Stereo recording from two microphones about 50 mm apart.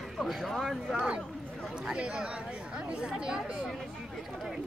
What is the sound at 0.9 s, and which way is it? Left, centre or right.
Speech, right.